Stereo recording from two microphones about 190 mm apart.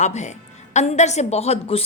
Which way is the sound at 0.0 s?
40° left (ahead or behind).